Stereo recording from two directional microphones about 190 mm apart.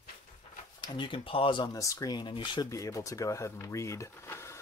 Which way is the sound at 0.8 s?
25° left (ahead or behind).